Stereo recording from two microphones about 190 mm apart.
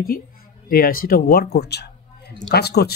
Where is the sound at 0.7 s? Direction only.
50° left (ahead or behind).